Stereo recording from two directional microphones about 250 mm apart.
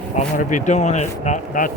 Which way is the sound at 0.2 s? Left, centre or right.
Left.